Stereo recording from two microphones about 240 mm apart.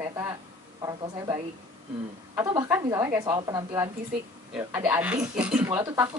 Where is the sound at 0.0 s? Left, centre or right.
Centre.